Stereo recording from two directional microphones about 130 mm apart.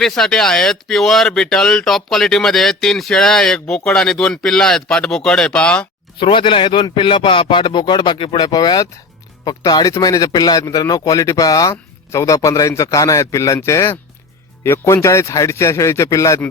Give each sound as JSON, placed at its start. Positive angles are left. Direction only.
{"t": 0.0, "sound": "speech", "side_deg": 5}
{"t": 6.1, "sound": "speech", "side_deg": 40}